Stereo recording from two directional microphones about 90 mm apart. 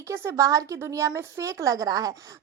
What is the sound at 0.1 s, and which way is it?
A woman's voice, 35° right (ahead or behind).